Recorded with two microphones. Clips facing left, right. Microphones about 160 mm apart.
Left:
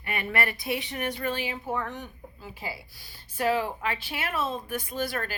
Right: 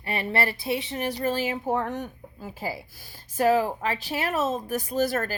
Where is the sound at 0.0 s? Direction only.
30° right (ahead or behind).